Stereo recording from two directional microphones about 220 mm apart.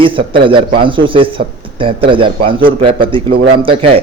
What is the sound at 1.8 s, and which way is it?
A man's voice, 25° right (ahead or behind).